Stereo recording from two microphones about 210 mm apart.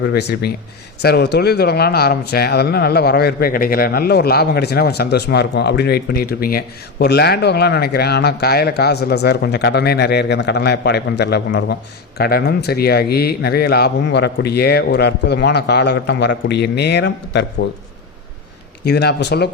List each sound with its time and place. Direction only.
0.0 s a man's voice: 50° left (ahead or behind)
18.9 s a man's voice: 50° left (ahead or behind)